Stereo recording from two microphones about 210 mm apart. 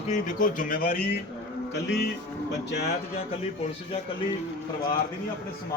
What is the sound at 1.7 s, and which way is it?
Cattle, 55° left (ahead or behind).